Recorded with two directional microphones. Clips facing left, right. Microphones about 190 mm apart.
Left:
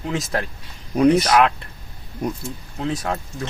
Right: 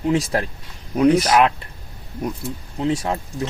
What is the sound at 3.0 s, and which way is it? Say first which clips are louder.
Speech: right 2 dB; 10° right (ahead or behind).